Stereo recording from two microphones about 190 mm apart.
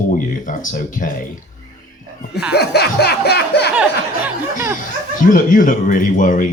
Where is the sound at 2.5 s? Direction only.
60° left (ahead or behind).